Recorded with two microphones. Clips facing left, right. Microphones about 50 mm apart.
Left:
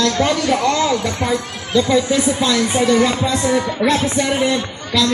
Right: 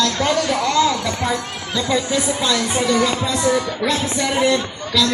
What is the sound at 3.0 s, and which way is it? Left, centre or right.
Speech, centre.